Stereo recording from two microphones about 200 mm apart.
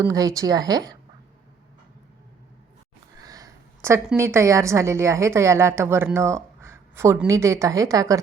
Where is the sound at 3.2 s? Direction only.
15° right (ahead or behind).